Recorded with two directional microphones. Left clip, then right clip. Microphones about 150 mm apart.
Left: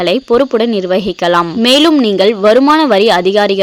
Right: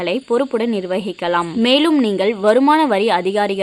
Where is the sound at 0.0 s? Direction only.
35° left (ahead or behind).